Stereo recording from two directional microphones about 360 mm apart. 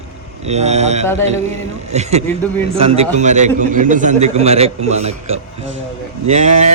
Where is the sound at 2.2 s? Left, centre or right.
Centre.